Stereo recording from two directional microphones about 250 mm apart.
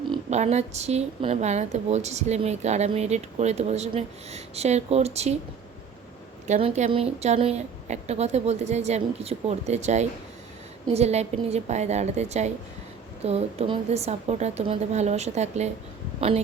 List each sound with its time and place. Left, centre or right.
0.1 s speech: right
6.5 s speech: right